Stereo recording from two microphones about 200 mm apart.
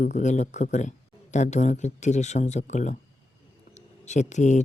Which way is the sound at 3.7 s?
35° left (ahead or behind).